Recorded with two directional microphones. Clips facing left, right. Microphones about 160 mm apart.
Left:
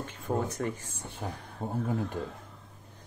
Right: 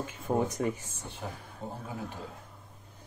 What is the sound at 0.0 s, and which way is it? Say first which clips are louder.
Speech: right 2 dB; 15° right (ahead or behind).